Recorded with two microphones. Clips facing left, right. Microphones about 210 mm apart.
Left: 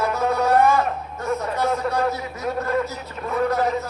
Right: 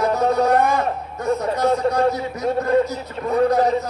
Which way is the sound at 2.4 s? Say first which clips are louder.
Right 5 dB; 30° right (ahead or behind).